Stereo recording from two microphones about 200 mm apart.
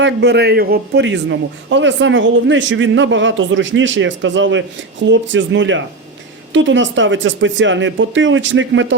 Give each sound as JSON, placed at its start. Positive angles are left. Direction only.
{"t": 0.0, "sound": "a man's voice", "side_deg": -60}